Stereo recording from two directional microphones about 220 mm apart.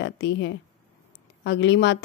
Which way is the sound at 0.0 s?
50° left (ahead or behind).